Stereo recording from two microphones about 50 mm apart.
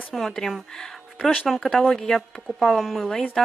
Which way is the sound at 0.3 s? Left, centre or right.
Centre.